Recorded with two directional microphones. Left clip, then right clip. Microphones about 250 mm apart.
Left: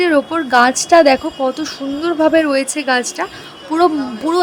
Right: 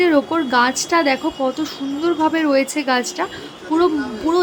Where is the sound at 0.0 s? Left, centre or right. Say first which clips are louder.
Left 2 dB; centre.